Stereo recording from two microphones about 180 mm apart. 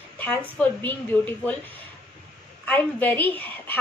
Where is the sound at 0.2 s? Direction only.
10° left (ahead or behind).